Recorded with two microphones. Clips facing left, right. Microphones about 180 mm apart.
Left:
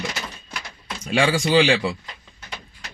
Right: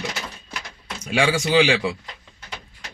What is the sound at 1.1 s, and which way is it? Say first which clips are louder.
Speech: left 1 dB; 5° right (ahead or behind).